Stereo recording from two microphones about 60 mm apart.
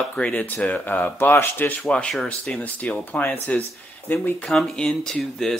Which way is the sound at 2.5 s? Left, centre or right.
Left.